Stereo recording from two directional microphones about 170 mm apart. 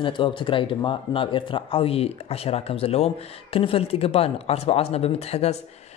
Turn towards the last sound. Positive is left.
turn(degrees=40)  # may be behind; listen again after turning